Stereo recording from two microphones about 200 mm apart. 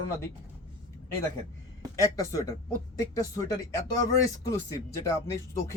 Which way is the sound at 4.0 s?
15° left (ahead or behind).